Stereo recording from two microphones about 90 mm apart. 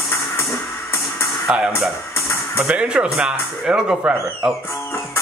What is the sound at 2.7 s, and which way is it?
Speech, 10° right (ahead or behind).